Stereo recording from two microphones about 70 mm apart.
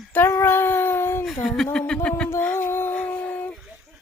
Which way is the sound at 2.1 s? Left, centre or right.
Centre.